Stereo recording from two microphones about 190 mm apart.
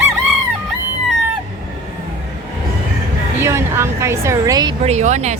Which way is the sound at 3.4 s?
15° right (ahead or behind).